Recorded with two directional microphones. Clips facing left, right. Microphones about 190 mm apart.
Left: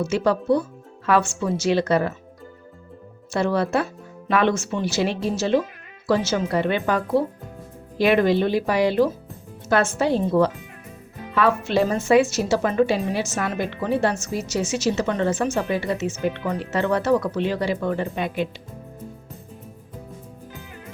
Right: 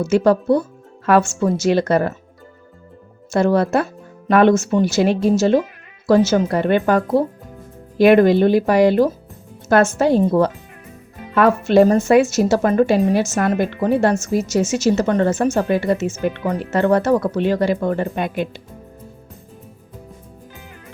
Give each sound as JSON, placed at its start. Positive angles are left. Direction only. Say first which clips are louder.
{"t": 0.0, "sound": "a woman's voice", "louder": "right 6 dB", "side_deg": -45}
{"t": 3.3, "sound": "a woman's voice", "louder": "right 5 dB", "side_deg": -45}